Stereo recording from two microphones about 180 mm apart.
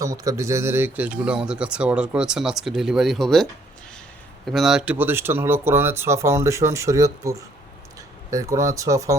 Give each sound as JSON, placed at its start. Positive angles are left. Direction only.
{"t": 0.0, "sound": "speech", "side_deg": -20}
{"t": 4.5, "sound": "speech", "side_deg": -5}